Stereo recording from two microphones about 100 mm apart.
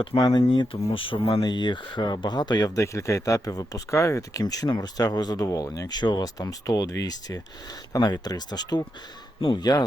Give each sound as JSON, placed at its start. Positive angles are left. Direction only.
{"t": 0.2, "sound": "speech", "side_deg": 40}
{"t": 0.4, "sound": "speech", "side_deg": 55}
{"t": 1.5, "sound": "speech", "side_deg": 50}